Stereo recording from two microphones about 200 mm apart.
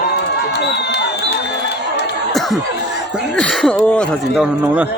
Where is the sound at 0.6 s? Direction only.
60° left (ahead or behind).